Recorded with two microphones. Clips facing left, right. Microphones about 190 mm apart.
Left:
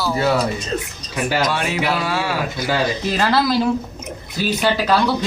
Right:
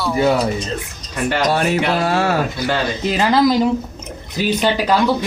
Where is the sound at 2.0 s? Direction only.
45° right (ahead or behind).